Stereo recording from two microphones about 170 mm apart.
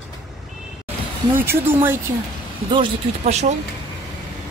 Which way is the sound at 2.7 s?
30° right (ahead or behind).